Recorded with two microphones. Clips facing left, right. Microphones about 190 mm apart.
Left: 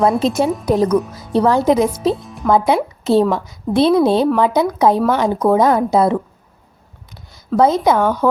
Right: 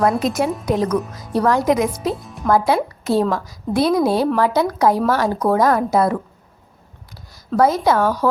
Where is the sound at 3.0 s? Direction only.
25° left (ahead or behind).